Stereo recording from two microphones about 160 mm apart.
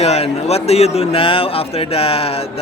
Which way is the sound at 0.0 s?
40° left (ahead or behind).